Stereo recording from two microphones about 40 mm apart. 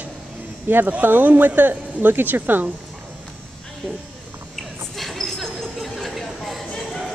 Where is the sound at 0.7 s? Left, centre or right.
Right.